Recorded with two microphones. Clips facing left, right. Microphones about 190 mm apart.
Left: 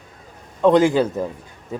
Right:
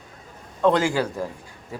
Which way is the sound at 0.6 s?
20° left (ahead or behind).